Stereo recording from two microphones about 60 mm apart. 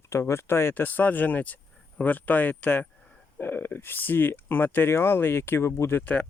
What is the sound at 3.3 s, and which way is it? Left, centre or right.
Speech, left.